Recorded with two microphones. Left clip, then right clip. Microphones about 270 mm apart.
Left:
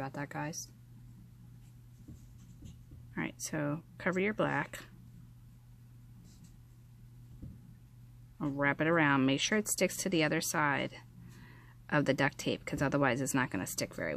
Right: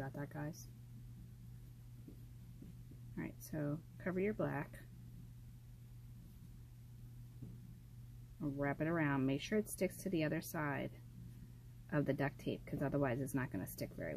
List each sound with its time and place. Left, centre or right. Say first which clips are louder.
0.0 s speech: left 8 dB; left
3.2 s speech: left 9 dB; left
8.4 s speech: left 9 dB; left
11.9 s speech: left 9 dB; left